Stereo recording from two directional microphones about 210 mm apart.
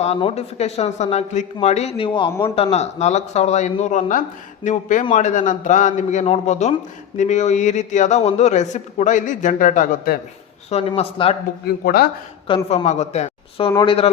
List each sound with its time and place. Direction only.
0.0 s a man's voice: 30° left (ahead or behind)
10.7 s a man's voice: 30° left (ahead or behind)
12.7 s a man's voice: 30° left (ahead or behind)